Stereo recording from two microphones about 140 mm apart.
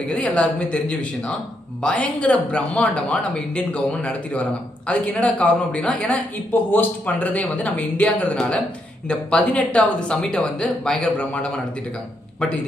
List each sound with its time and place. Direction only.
0.1 s speech: 10° left (ahead or behind)